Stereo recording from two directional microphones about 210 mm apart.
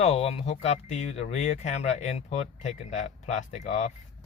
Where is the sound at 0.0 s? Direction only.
30° left (ahead or behind).